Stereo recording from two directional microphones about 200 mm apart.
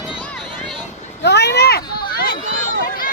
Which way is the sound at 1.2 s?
55° left (ahead or behind).